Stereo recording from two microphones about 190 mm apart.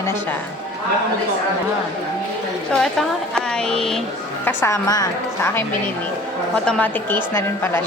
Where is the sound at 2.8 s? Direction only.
Centre (ahead or behind).